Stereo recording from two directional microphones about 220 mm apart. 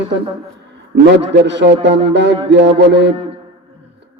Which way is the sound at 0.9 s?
50° right (ahead or behind).